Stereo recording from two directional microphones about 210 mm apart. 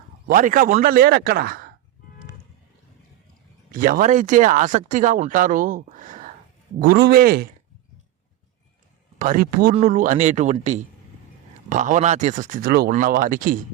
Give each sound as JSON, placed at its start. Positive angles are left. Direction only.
{"t": 0.3, "sound": "a man's voice", "side_deg": -40}
{"t": 3.7, "sound": "a man's voice", "side_deg": -40}
{"t": 9.1, "sound": "speech", "side_deg": -40}